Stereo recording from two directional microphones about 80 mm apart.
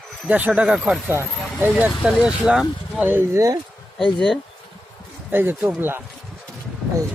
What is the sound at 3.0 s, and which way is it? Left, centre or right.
Speech, right.